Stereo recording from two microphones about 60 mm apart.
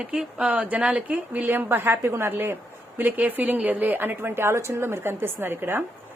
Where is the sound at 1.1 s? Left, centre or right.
Right.